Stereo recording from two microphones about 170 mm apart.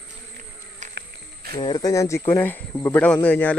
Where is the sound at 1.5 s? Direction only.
30° left (ahead or behind); by 3.6 s 10° left (ahead or behind).